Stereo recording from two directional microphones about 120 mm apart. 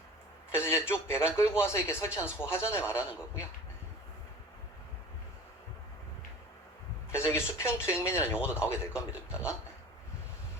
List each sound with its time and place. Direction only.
0.5 s a man's voice: 20° left (ahead or behind)
7.1 s a man's voice: 20° left (ahead or behind)